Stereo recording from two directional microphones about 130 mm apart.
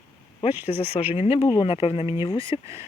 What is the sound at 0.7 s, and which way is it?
Speech, 50° left (ahead or behind).